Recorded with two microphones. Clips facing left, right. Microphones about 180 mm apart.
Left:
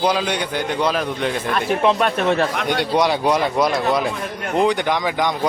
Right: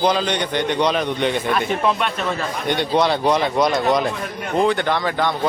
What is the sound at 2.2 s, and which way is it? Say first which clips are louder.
Speech: left 6 dB; 70° left (ahead or behind).